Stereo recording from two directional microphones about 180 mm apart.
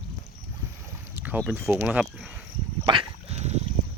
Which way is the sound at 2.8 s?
30° right (ahead or behind).